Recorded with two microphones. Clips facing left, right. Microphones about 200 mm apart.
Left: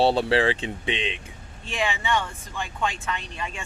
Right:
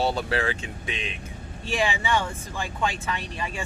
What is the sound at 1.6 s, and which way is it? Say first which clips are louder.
Speech: right 1 dB; centre (ahead or behind).